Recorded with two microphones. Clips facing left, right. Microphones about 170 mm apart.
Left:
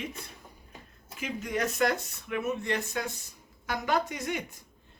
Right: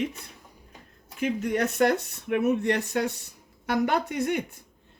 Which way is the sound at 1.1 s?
60° right (ahead or behind).